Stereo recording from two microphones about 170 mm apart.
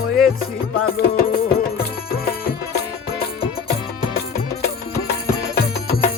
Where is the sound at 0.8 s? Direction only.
65° left (ahead or behind).